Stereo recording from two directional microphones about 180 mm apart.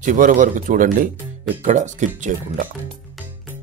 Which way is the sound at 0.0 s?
45° right (ahead or behind).